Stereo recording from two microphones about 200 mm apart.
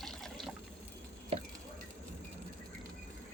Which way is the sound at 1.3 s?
30° right (ahead or behind).